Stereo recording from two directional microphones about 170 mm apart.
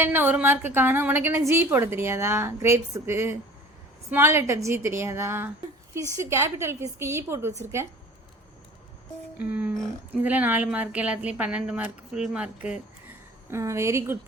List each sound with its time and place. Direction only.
0.0 s a woman's voice: 10° right (ahead or behind)
9.4 s a woman's voice: 10° right (ahead or behind)
13.5 s a woman's voice: 15° right (ahead or behind)